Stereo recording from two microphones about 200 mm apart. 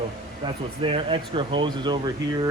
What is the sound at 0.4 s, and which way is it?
Speech, 25° right (ahead or behind).